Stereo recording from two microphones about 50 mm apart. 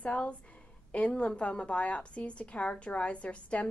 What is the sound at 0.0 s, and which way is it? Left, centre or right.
A woman's voice, left.